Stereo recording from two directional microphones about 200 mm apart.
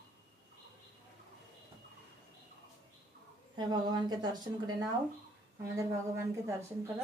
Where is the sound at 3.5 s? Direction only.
20° right (ahead or behind).